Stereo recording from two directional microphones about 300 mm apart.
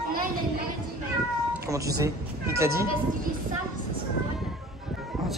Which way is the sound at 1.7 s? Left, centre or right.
Centre.